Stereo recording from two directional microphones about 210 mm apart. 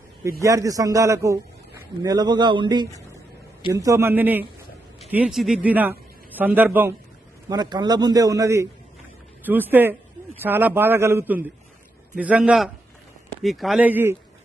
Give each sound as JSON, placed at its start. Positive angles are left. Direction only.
{"t": 0.3, "sound": "a man's voice", "side_deg": -15}
{"t": 7.5, "sound": "a man's voice", "side_deg": -20}